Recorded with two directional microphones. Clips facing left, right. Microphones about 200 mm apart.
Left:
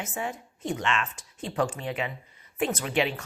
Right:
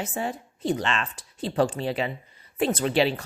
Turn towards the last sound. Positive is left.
turn(degrees=-35)  # may be behind; listen again after turning